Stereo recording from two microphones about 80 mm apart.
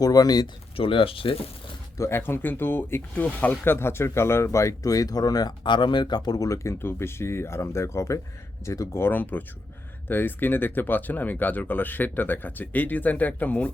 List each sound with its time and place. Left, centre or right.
0.0 s speech: left
2.0 s speech: left